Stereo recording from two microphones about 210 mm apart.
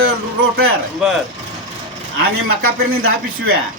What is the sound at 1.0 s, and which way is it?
Speech, 5° right (ahead or behind).